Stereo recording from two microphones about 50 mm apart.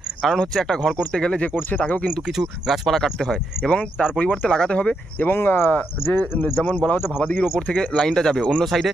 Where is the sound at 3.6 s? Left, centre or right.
Left.